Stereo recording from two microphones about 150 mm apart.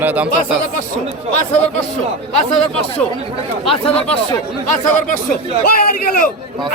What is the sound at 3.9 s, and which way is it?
Speech, 40° left (ahead or behind).